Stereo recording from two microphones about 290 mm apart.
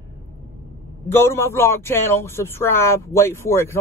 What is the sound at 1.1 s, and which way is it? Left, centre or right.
A man's voice, centre.